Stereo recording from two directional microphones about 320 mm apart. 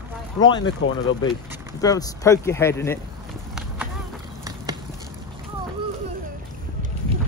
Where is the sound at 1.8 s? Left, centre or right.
Centre.